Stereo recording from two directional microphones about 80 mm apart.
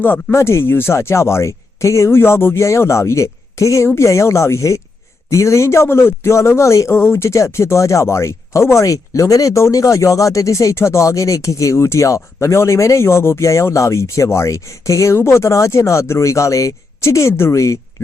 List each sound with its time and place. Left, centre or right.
0.0 s a man's voice: left